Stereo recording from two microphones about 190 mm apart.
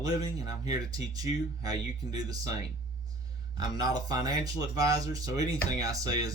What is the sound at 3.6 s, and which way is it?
Speech, 20° right (ahead or behind).